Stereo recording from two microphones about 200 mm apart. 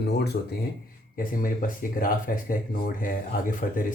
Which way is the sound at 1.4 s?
45° left (ahead or behind).